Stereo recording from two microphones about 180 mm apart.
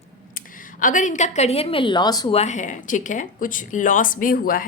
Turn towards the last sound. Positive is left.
turn(degrees=50)  # may be behind; listen again after turning